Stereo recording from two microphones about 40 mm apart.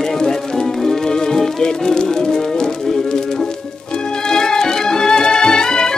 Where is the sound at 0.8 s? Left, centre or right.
Centre.